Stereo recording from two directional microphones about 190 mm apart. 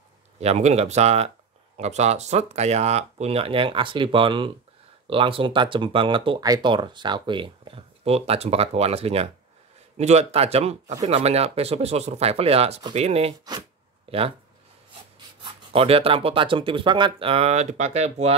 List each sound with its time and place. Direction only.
0.4 s speech: 35° right (ahead or behind)
15.4 s speech: 30° right (ahead or behind)